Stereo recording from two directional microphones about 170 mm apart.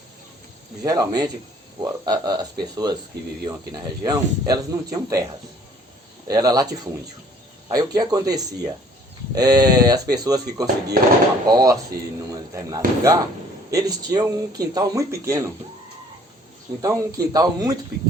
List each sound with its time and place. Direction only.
0.9 s speech: 20° right (ahead or behind)
6.2 s speech: 20° right (ahead or behind)
7.7 s speech: 25° right (ahead or behind)
16.8 s speech: 20° right (ahead or behind)